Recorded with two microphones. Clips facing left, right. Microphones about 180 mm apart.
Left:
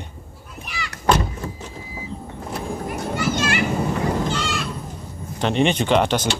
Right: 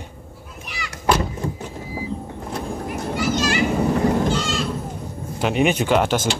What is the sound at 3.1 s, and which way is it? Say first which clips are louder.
Children playing: right 2 dB; 55° left (ahead or behind).